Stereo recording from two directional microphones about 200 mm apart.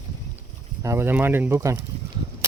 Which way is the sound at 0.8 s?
10° right (ahead or behind).